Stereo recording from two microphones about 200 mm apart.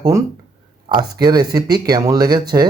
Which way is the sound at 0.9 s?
20° right (ahead or behind).